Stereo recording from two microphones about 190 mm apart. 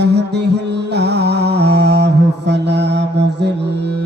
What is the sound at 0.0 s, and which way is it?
Music, 60° right (ahead or behind).